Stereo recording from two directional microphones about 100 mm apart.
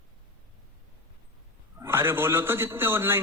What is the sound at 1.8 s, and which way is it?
A man's voice, 25° right (ahead or behind).